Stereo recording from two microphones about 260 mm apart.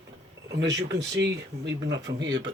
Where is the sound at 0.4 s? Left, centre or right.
Right.